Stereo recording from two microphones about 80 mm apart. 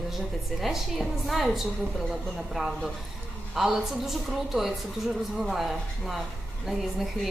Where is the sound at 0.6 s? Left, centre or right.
Centre.